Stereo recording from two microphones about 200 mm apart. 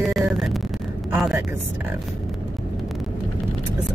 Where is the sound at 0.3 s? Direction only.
Centre (ahead or behind).